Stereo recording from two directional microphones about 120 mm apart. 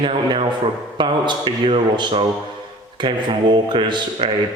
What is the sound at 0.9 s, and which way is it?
Speech, 40° right (ahead or behind).